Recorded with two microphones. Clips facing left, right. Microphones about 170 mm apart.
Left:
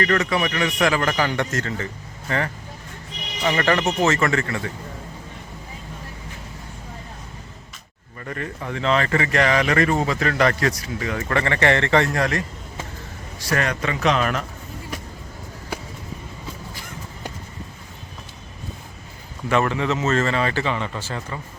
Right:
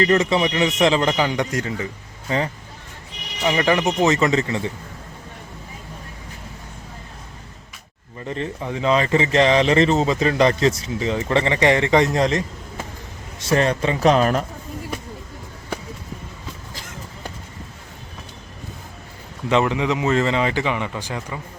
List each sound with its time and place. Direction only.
0.0 s speech: 25° right (ahead or behind)
3.4 s speech: 10° right (ahead or behind)
8.2 s speech: 20° right (ahead or behind); by 14.4 s 35° right (ahead or behind)
19.5 s speech: 15° right (ahead or behind)